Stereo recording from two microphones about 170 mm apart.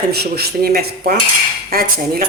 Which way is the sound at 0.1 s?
70° right (ahead or behind).